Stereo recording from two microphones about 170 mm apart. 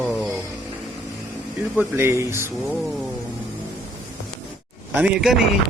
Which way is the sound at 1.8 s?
15° right (ahead or behind).